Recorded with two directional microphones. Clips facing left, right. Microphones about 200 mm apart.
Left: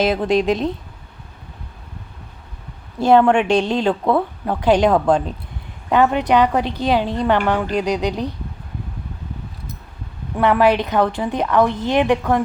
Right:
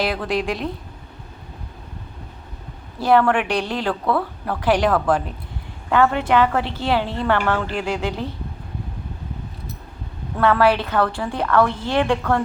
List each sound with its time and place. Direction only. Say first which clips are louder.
0.0 s a woman's voice: left 5 dB; 20° left (ahead or behind)
3.0 s a woman's voice: left 4 dB; 20° left (ahead or behind)
10.3 s a woman's voice: left 2 dB; 15° left (ahead or behind)